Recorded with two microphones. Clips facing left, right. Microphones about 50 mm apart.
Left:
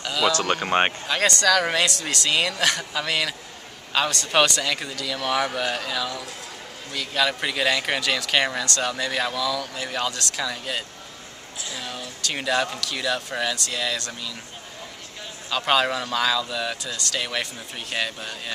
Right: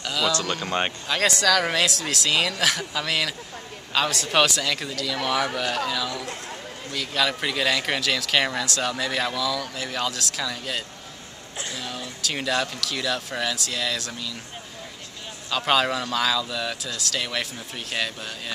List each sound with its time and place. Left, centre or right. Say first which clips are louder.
0.0 s a sound: left 2 dB; centre
0.3 s speech: left 3 dB; left
1.0 s speech: left 1 dB; centre
11.7 s a sound: left 2 dB; centre
12.8 s speech: left 1 dB; centre
15.5 s speech: even; centre